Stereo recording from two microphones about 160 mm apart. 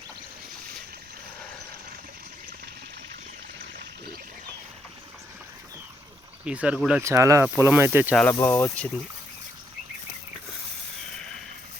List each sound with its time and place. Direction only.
6.4 s speech: 5° right (ahead or behind)
7.0 s speech: 20° right (ahead or behind)
8.1 s speech: 10° left (ahead or behind)